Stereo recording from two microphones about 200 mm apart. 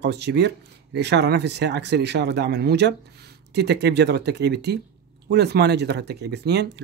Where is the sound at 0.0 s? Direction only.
55° right (ahead or behind).